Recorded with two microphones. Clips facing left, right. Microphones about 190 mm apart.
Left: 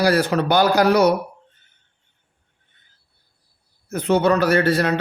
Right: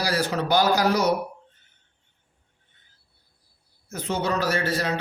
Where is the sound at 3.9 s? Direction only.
60° left (ahead or behind).